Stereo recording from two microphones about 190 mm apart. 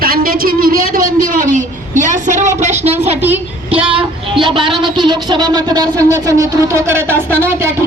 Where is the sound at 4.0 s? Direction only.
25° right (ahead or behind).